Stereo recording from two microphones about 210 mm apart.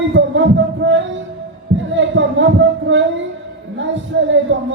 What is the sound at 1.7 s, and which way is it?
Heart sounds, 65° right (ahead or behind).